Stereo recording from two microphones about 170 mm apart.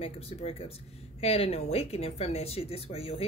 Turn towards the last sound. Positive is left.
turn(degrees=35)  # may be behind; listen again after turning